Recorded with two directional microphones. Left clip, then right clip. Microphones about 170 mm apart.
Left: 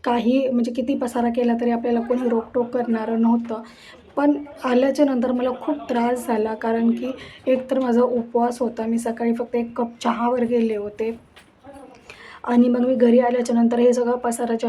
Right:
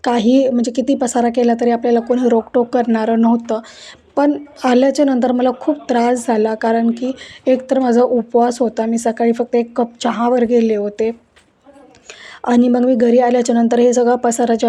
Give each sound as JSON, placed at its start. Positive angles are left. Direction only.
{"t": 0.0, "sound": "speech", "side_deg": -35}
{"t": 12.4, "sound": "speech", "side_deg": -35}